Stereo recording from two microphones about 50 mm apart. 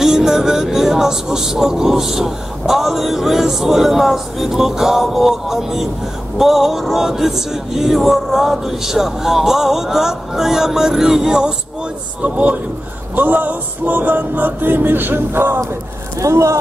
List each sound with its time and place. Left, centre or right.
0.0 s speech: centre
12.2 s a man's voice: right
13.1 s music: right
16.2 s speech: right